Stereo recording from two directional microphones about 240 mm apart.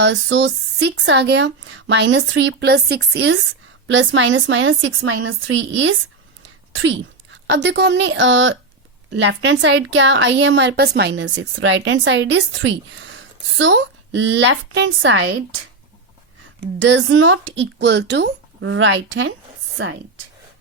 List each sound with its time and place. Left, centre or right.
0.0 s a woman's voice: right
6.4 s a sound: right
7.4 s a woman's voice: right
16.8 s a woman's voice: right